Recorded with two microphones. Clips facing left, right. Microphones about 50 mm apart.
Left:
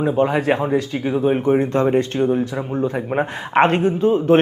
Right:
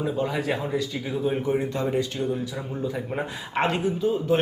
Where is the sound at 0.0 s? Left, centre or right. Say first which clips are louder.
Left 8 dB; left.